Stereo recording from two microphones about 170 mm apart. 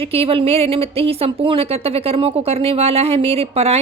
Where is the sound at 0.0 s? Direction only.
35° right (ahead or behind).